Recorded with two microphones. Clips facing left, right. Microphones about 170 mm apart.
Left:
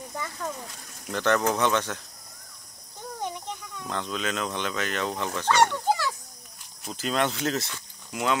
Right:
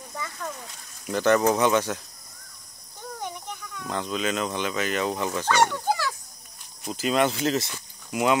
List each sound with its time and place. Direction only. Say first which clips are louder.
0.2 s speech: even; 15° left (ahead or behind)
1.0 s fowl: right 4 dB; 5° right (ahead or behind)
1.5 s speech: right 3 dB; 5° right (ahead or behind)
3.8 s fowl: right 3 dB; 5° right (ahead or behind)
7.7 s speech: right 5 dB; 10° right (ahead or behind)